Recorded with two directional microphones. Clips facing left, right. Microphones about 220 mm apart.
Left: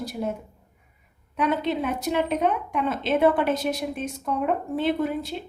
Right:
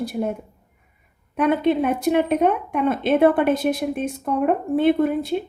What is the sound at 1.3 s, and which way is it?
A woman's voice, 55° right (ahead or behind).